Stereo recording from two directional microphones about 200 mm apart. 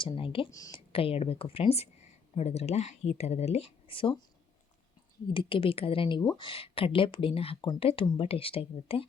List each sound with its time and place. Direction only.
0.0 s speech: 25° left (ahead or behind)
5.3 s speech: 25° left (ahead or behind)